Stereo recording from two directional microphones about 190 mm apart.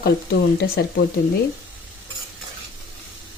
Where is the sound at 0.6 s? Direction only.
60° left (ahead or behind).